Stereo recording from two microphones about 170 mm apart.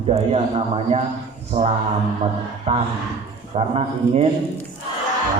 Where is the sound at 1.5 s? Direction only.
30° right (ahead or behind).